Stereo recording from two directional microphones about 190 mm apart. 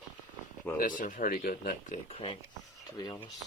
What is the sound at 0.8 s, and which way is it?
Speech, 45° left (ahead or behind).